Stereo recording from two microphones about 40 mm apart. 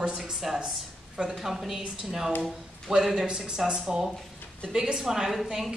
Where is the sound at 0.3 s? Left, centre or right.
Centre.